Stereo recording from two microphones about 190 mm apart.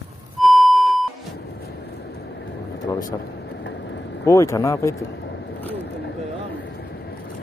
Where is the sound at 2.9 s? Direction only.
20° left (ahead or behind).